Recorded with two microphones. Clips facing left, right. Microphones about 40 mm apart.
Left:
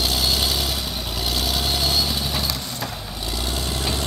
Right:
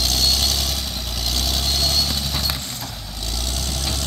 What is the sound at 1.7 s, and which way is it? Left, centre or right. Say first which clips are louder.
Vehicle: right 1 dB; centre.